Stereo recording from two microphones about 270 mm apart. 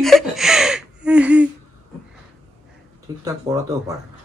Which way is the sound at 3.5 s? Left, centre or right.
Centre.